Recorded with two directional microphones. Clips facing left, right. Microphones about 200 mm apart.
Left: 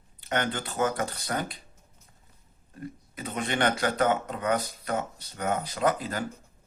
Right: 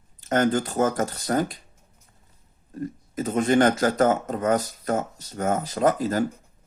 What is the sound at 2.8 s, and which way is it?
Speech, 45° right (ahead or behind).